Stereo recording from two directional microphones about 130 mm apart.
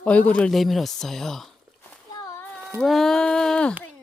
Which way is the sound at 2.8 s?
Centre (ahead or behind).